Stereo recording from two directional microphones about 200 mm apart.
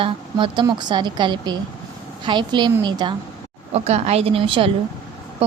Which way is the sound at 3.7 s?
30° right (ahead or behind).